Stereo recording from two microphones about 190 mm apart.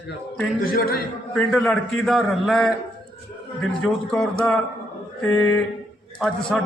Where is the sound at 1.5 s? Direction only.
Centre (ahead or behind).